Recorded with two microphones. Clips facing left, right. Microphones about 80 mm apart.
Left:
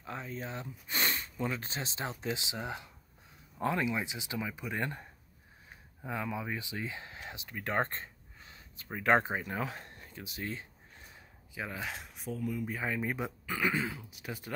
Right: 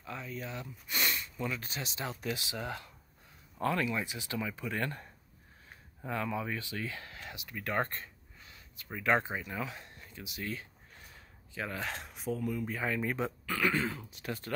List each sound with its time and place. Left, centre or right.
0.0 s speech: left
11.5 s speech: centre
13.8 s speech: centre